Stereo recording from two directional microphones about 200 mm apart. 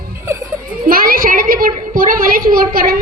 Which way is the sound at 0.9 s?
45° right (ahead or behind).